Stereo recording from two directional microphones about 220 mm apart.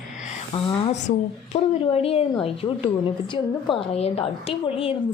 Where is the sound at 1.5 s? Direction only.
25° left (ahead or behind).